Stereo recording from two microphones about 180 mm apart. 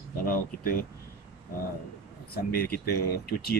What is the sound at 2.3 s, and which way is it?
Speech, 55° left (ahead or behind).